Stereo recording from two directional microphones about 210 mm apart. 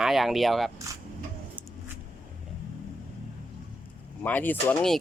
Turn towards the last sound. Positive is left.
turn(degrees=5)  # may be behind; listen again after turning